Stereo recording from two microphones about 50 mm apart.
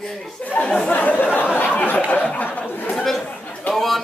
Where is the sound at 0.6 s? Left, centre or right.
Left.